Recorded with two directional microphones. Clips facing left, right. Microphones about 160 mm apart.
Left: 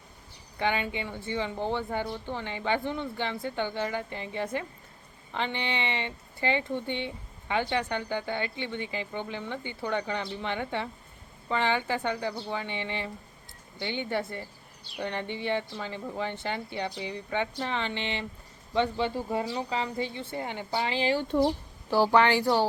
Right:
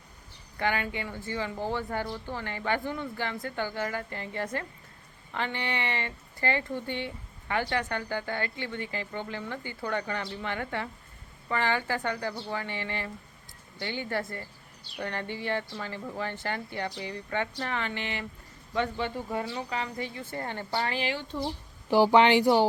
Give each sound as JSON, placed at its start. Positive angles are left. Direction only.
{"t": 0.6, "sound": "speech", "side_deg": 20}
{"t": 20.3, "sound": "a woman's voice", "side_deg": 15}
{"t": 21.0, "sound": "speech", "side_deg": 35}
{"t": 21.2, "sound": "speech", "side_deg": 70}
{"t": 21.8, "sound": "speech", "side_deg": -15}